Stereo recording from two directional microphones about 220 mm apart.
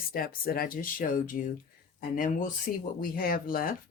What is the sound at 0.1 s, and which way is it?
Speech, 40° left (ahead or behind).